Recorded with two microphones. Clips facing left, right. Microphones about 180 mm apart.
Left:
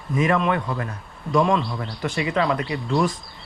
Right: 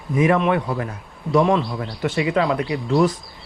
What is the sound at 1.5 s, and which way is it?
Speech, centre (ahead or behind).